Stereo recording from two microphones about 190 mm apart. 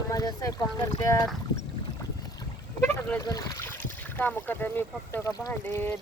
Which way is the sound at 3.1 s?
15° left (ahead or behind).